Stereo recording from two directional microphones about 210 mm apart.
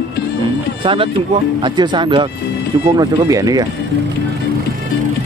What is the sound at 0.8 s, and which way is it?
Speech, 25° right (ahead or behind).